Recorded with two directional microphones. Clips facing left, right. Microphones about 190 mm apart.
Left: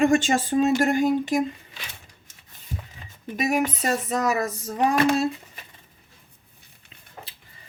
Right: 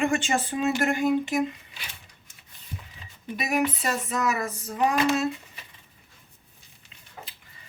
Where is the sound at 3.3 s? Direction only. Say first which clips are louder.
Left 2 dB; 45° left (ahead or behind).